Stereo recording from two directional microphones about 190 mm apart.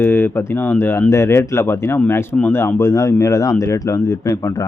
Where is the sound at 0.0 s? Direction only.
10° left (ahead or behind).